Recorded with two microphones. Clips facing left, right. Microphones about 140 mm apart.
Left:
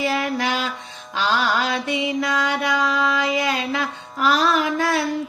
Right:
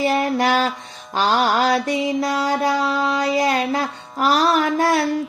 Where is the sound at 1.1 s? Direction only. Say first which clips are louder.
Right 3 dB; 40° right (ahead or behind).